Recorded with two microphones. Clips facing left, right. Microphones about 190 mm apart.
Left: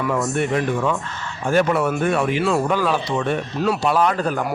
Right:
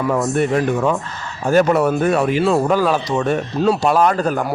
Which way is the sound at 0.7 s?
40° right (ahead or behind).